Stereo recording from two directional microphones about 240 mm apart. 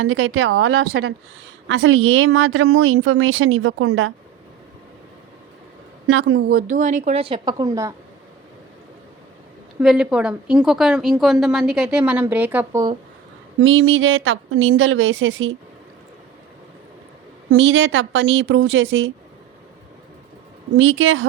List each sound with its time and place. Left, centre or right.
0.0 s a woman's voice: right
6.1 s a woman's voice: right; by 7.9 s centre
9.8 s a woman's voice: centre
13.6 s speech: right
17.5 s speech: right
20.7 s speech: right